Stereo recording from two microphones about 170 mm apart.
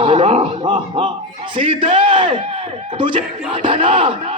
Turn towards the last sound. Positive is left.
turn(degrees=-30)  # may be behind; listen again after turning